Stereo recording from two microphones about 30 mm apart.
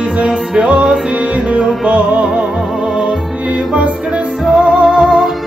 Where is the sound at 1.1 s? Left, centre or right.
Right.